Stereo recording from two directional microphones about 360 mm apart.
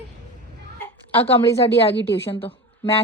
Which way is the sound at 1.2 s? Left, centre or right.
Centre.